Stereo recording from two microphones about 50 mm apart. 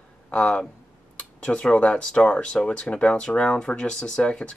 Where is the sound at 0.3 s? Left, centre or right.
Left.